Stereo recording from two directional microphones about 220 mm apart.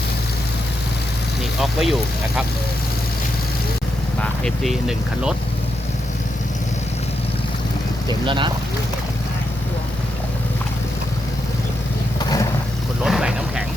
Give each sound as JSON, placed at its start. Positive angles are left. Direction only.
{"t": 1.6, "sound": "speech", "side_deg": 0}
{"t": 4.2, "sound": "speech", "side_deg": 0}
{"t": 8.3, "sound": "speech", "side_deg": -20}
{"t": 13.1, "sound": "vehicle", "side_deg": -5}